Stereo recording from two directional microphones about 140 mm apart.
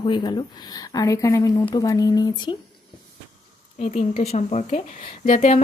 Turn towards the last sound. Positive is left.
turn(degrees=60)  # may be behind; listen again after turning